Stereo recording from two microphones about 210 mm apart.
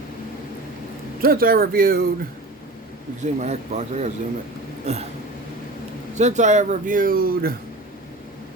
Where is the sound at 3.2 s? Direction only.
35° right (ahead or behind).